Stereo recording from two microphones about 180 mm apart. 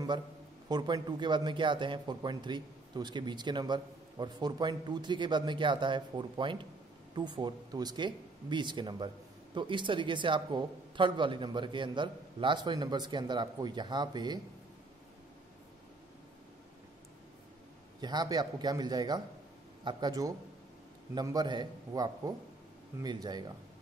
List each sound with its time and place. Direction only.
0.7 s a man's voice: 25° right (ahead or behind)
18.0 s a man's voice: 20° right (ahead or behind)